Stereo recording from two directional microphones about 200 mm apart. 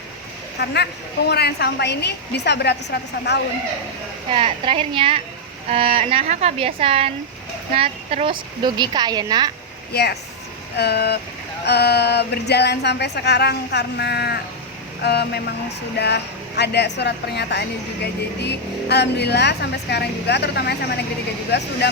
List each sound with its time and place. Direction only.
0.6 s speech: 55° left (ahead or behind)
4.3 s a woman's voice: 25° right (ahead or behind)
9.9 s speech: 55° left (ahead or behind)